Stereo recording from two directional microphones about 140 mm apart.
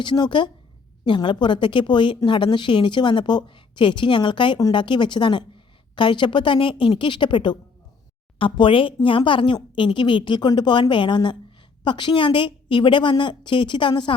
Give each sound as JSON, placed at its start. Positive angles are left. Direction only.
{"t": 0.0, "sound": "a woman's voice", "side_deg": 35}